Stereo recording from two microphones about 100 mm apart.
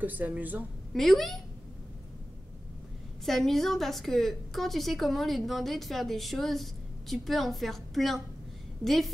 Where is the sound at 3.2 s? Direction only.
5° left (ahead or behind).